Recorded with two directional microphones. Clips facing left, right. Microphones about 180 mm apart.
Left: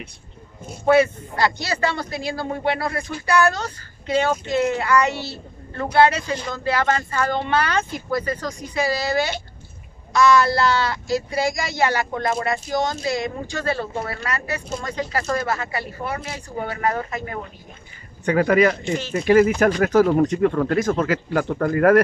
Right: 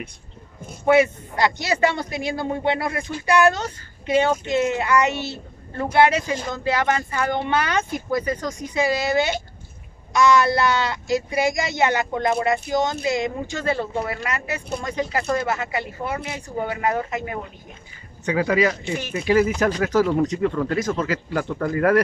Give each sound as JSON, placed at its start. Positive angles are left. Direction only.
{"t": 0.9, "sound": "a man's voice", "side_deg": -20}
{"t": 18.2, "sound": "speech", "side_deg": 55}